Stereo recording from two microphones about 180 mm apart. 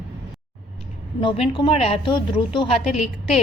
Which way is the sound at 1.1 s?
30° left (ahead or behind).